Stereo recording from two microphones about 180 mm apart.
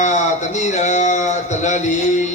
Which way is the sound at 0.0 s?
40° left (ahead or behind).